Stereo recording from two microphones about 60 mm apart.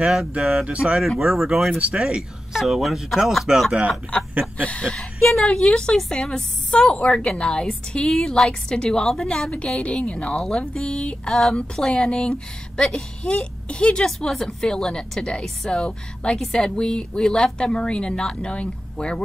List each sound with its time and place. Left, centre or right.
0.0 s speech: centre
1.8 s speech: centre
2.5 s speech: centre
4.1 s a sound: centre
4.6 s a woman's voice: left